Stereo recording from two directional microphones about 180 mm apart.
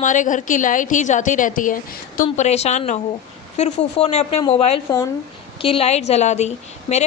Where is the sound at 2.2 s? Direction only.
35° left (ahead or behind).